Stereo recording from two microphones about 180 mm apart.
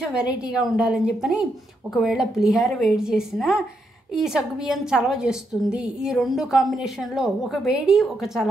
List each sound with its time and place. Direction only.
0.1 s a woman's voice: 5° right (ahead or behind)